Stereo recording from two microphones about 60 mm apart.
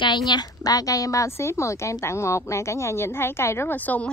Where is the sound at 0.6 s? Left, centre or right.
Left.